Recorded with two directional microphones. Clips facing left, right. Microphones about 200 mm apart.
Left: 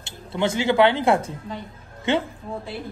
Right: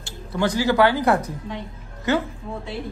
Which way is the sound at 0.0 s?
25° left (ahead or behind).